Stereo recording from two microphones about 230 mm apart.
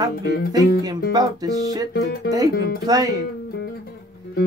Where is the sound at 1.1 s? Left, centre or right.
Centre.